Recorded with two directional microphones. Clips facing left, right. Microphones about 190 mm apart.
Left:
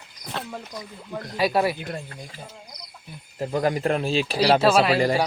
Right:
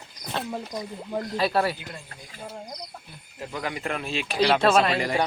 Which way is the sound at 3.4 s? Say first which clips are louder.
Left 8 dB; 40° left (ahead or behind).